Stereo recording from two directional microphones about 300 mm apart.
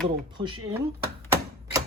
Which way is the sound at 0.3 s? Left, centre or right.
Centre.